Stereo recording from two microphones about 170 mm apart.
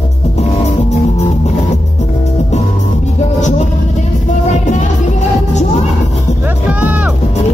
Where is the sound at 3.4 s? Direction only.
45° left (ahead or behind).